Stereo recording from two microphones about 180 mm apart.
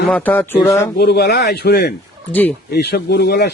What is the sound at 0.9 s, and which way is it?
Speech, 65° left (ahead or behind).